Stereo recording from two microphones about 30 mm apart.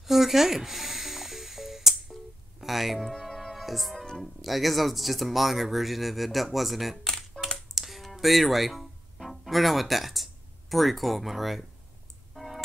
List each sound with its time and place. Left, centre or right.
0.0 s music: centre
2.6 s speech: centre
3.0 s music: centre
3.5 s music: centre
3.9 s music: centre
4.2 s speech: centre
7.6 s music: centre